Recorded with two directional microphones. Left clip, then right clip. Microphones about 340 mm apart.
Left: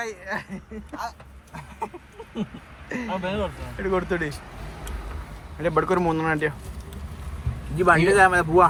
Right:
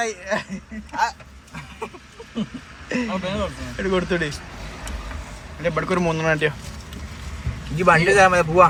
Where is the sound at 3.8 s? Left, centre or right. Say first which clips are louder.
Right 3 dB; centre.